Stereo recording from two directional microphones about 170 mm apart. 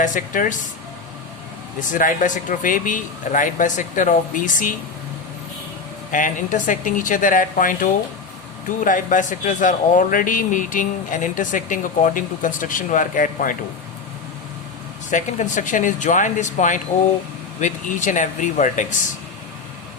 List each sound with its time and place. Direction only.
0.0 s speech: 50° left (ahead or behind)
1.9 s speech: 50° left (ahead or behind)
6.1 s speech: 50° left (ahead or behind)
15.1 s speech: 45° left (ahead or behind)